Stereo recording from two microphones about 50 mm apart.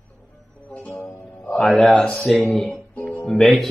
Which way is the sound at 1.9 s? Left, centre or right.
Centre.